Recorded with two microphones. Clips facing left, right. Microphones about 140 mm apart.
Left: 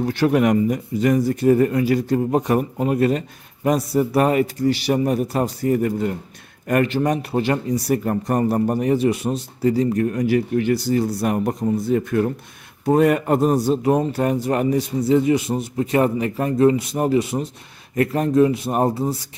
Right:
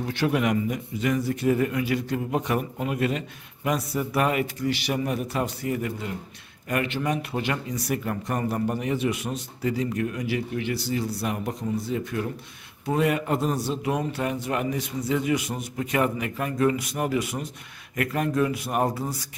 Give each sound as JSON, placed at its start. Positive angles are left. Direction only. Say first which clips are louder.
{"t": 0.0, "sound": "speech", "louder": "left 7 dB", "side_deg": 40}